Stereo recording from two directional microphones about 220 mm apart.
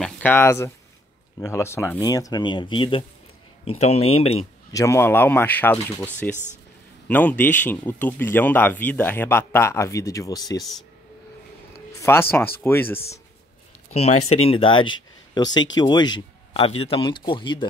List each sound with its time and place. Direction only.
0.0 s a man's voice: 10° left (ahead or behind); by 4.5 s 25° left (ahead or behind)
4.7 s a man's voice: 10° left (ahead or behind)
7.1 s a man's voice: 5° left (ahead or behind)
12.0 s a man's voice: 10° left (ahead or behind)
13.9 s a man's voice: 30° left (ahead or behind)